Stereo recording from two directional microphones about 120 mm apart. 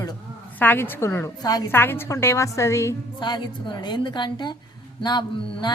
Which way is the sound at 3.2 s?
40° left (ahead or behind).